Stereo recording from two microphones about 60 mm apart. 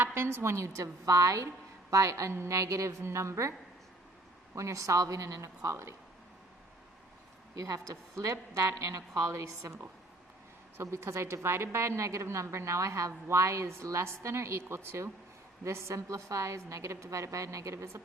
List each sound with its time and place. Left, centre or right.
0.0 s a woman's voice: right
4.5 s a woman's voice: right
7.5 s a woman's voice: right
10.9 s a woman's voice: right